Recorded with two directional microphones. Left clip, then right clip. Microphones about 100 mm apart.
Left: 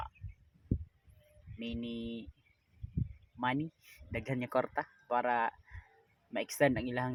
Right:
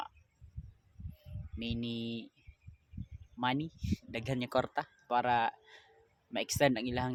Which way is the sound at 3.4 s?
25° right (ahead or behind).